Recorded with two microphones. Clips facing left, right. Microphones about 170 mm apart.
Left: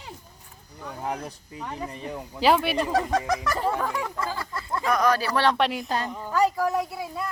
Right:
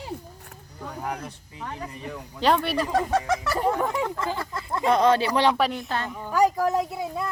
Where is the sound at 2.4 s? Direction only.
5° left (ahead or behind).